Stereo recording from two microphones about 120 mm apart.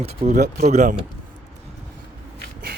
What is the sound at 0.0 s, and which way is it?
Speech, 55° right (ahead or behind).